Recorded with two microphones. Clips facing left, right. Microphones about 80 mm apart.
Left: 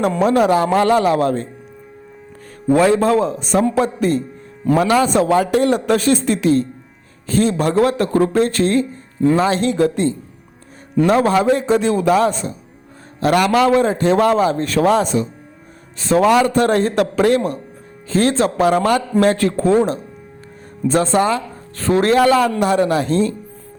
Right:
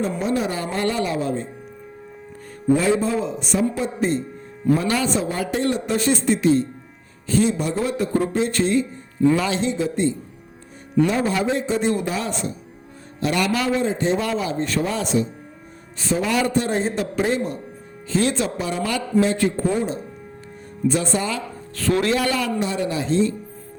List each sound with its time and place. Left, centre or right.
0.0 s speech: left
2.7 s speech: left
3.5 s a man's voice: left
4.6 s speech: left
5.3 s a man's voice: left
6.3 s a man's voice: left
9.6 s a man's voice: left
12.0 s a man's voice: left
13.9 s a man's voice: left
16.1 s a man's voice: left
18.1 s a man's voice: left
21.2 s speech: left